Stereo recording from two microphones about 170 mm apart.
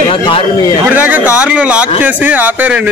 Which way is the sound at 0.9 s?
10° right (ahead or behind).